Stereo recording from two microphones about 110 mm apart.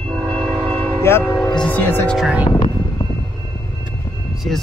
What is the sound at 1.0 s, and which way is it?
Speech, 20° left (ahead or behind).